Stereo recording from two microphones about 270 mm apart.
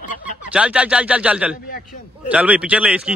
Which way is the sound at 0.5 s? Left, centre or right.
Centre.